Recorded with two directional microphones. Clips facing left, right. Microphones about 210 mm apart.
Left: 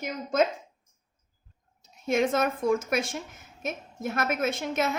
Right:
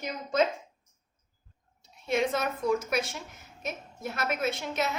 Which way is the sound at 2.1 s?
50° left (ahead or behind).